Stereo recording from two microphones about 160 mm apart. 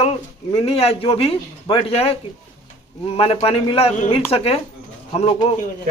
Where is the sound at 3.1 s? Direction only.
35° left (ahead or behind).